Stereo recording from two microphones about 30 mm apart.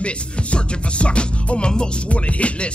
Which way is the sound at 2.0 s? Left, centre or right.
Left.